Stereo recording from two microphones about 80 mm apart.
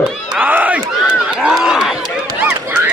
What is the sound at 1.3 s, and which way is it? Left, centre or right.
Run, centre.